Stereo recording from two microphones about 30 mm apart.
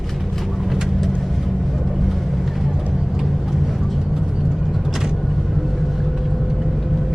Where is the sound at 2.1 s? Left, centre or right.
Centre.